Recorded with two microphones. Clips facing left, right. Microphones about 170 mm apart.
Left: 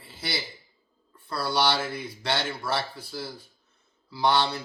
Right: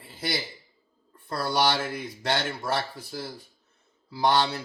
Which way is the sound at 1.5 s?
45° right (ahead or behind).